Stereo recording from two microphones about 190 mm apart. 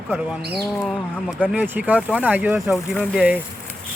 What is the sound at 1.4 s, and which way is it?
Speech, 10° right (ahead or behind).